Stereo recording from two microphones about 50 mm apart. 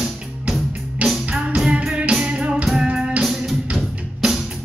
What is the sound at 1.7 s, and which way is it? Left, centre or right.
Music, right.